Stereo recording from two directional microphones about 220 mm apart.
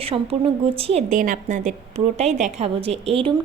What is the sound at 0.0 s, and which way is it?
Speech, 25° right (ahead or behind).